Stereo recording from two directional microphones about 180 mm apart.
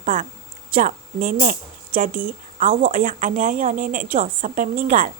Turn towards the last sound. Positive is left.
turn(degrees=-45)  # may be behind; listen again after turning